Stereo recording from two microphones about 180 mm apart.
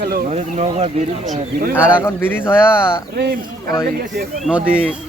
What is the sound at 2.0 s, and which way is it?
Speech, 10° left (ahead or behind).